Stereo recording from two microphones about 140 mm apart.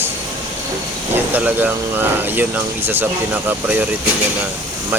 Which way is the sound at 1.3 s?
10° right (ahead or behind).